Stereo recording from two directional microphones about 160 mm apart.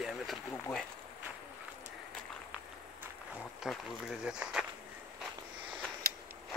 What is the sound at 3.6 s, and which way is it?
Speech, 5° right (ahead or behind).